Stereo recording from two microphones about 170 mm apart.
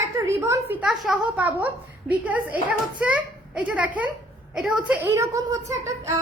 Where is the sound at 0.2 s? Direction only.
20° right (ahead or behind).